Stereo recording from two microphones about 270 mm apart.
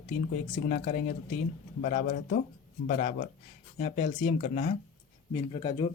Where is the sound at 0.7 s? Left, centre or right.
Left.